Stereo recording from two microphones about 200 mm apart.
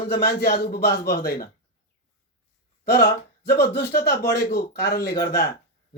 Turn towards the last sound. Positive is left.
turn(degrees=50)  # may be behind; listen again after turning